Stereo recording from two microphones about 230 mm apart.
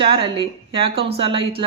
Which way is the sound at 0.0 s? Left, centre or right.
Right.